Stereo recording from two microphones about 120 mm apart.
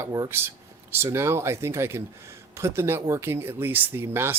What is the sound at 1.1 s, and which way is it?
Speech, 20° right (ahead or behind).